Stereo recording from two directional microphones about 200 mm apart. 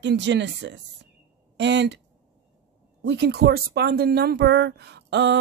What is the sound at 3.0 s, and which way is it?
Speech, 60° right (ahead or behind).